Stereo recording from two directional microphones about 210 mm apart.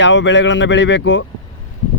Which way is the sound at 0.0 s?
60° left (ahead or behind).